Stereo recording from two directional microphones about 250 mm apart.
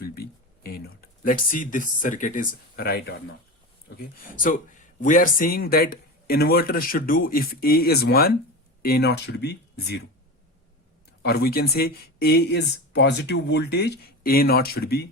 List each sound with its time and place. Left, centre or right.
0.0 s a sound: left
1.2 s speech: left
11.2 s speech: left